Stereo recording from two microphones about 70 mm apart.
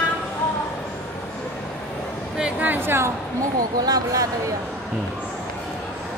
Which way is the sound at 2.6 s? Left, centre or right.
Right.